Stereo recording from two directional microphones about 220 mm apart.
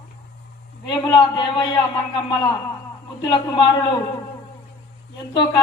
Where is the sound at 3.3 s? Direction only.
20° left (ahead or behind).